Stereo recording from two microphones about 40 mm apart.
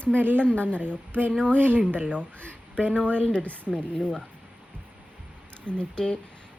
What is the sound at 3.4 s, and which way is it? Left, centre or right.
Speech, left.